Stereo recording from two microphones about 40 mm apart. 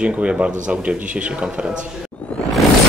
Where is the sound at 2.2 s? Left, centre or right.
Left.